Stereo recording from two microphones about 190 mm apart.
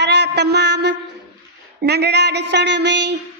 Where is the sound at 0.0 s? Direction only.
65° right (ahead or behind).